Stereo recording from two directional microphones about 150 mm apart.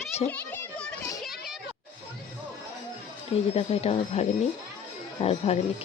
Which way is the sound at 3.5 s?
45° left (ahead or behind).